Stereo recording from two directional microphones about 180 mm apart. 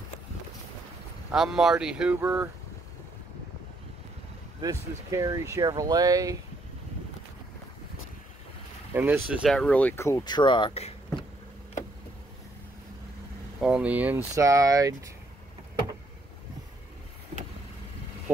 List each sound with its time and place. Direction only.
1.3 s speech: centre (ahead or behind)
4.6 s speech: 20° right (ahead or behind)
8.9 s speech: 10° right (ahead or behind); by 11.2 s 30° left (ahead or behind)
13.6 s speech: 5° right (ahead or behind)